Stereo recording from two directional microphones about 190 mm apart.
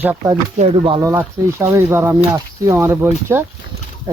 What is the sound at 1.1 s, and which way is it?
Speech, 15° right (ahead or behind).